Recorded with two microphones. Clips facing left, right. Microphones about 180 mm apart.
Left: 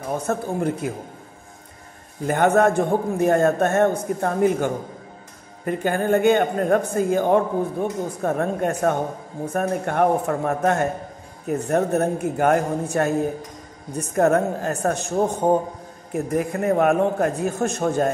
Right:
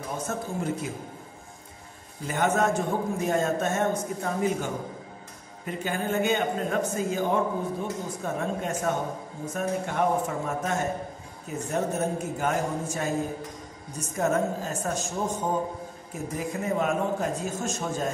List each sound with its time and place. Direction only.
0.3 s a man's voice: 55° left (ahead or behind)
2.2 s a man's voice: 60° left (ahead or behind)